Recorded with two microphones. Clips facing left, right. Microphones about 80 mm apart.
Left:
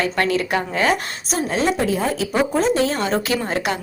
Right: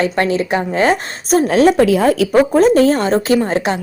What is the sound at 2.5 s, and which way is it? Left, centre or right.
A woman's voice, right.